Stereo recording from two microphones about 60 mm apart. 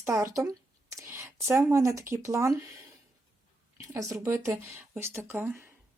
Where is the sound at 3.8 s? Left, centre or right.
Right.